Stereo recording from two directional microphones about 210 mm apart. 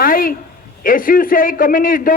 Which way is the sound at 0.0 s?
40° left (ahead or behind).